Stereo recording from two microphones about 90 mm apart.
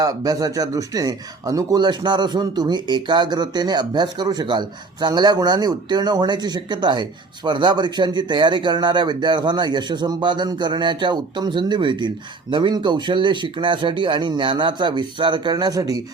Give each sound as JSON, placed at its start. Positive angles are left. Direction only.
{"t": 0.0, "sound": "speech", "side_deg": -40}
{"t": 1.8, "sound": "a man's voice", "side_deg": -55}